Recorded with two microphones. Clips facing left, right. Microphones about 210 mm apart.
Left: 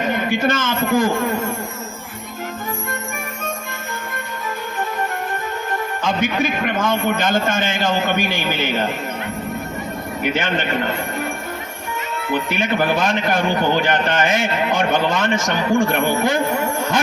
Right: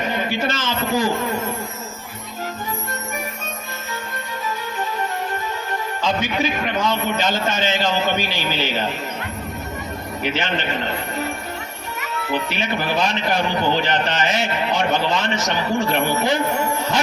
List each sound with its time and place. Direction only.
0.1 s a man's voice: 50° left (ahead or behind)
6.0 s a man's voice: 50° left (ahead or behind)
10.2 s a man's voice: 50° left (ahead or behind)
12.3 s a man's voice: 50° left (ahead or behind)